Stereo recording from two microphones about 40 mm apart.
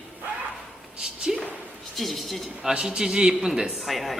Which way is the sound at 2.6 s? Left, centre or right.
Centre.